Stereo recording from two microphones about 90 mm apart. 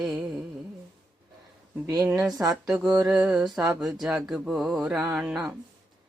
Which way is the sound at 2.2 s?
40° right (ahead or behind).